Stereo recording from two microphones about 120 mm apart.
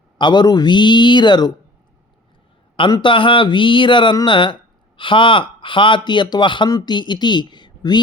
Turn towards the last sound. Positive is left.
turn(degrees=40)  # may be behind; listen again after turning